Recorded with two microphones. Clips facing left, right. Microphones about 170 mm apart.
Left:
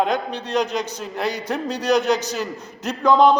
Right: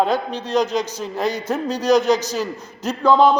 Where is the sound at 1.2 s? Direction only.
15° left (ahead or behind).